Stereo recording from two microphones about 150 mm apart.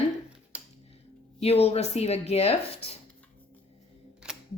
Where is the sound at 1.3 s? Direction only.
40° left (ahead or behind).